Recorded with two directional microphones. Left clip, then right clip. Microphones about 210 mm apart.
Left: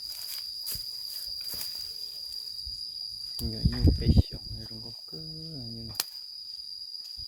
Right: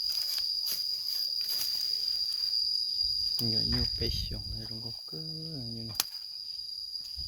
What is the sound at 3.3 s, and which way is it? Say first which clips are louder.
Speech: right 6 dB; 5° right (ahead or behind).